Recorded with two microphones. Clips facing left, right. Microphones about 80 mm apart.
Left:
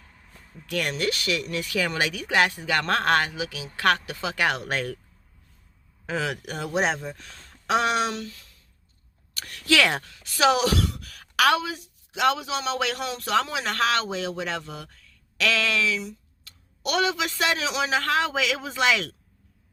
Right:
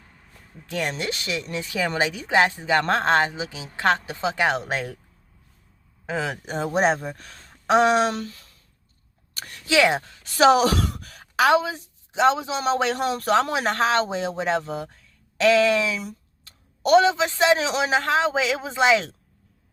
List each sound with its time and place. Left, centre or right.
0.7 s speech: right
6.1 s speech: right
9.3 s a sound: right
9.6 s speech: centre
10.1 s speech: right
11.1 s speech: right
18.0 s speech: right